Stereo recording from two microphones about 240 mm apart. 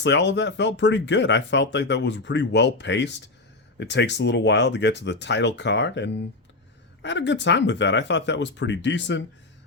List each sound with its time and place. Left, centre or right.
0.0 s speech: left